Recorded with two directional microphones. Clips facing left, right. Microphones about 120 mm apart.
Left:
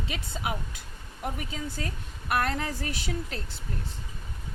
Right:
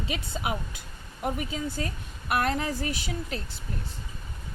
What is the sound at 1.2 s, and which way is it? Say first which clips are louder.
Speech: right 4 dB; 15° right (ahead or behind).